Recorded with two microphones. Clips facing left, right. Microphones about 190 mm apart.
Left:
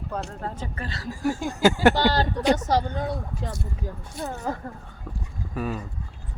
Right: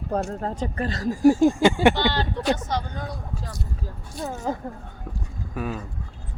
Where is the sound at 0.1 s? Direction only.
40° right (ahead or behind).